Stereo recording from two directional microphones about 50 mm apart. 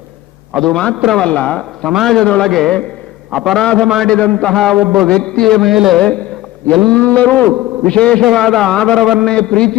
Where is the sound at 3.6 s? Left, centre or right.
Centre.